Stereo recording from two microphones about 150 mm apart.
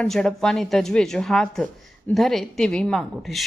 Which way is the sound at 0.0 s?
5° left (ahead or behind).